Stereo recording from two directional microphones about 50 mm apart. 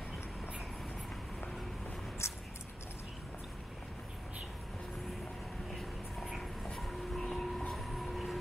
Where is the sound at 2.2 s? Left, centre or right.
Left.